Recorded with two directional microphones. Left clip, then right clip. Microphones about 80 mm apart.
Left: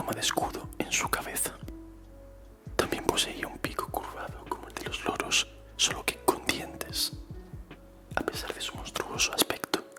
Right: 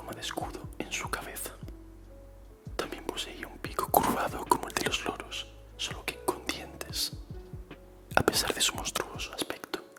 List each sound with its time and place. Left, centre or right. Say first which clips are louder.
0.0 s speech: left 7 dB; centre
2.7 s whispering: left 8 dB; centre
3.2 s speech: left 6 dB; centre
3.9 s whispering: right 10 dB; right
5.1 s whispering: left 11 dB; left; by 7.1 s centre
8.1 s speech: right 6 dB; centre
9.0 s speech: left 8 dB; centre